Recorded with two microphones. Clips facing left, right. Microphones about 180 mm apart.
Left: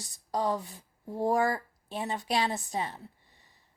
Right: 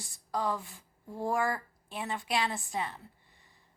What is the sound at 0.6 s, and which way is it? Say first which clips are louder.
Speech: left 5 dB; 20° left (ahead or behind).